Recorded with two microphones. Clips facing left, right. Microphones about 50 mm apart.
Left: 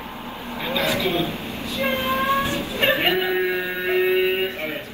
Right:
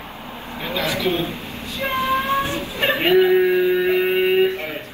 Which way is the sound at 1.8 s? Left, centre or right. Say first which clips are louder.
Right 3 dB; left.